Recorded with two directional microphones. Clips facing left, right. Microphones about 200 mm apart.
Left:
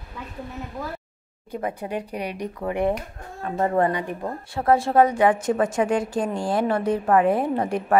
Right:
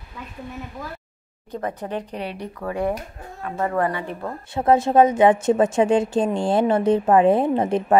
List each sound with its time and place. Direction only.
1.5 s speech: 10° left (ahead or behind)
3.4 s speech: 30° left (ahead or behind); by 4.3 s 15° left (ahead or behind)
4.6 s a woman's voice: 20° right (ahead or behind)